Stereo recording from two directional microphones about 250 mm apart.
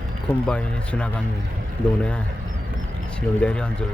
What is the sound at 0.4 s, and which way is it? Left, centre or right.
Speech, centre.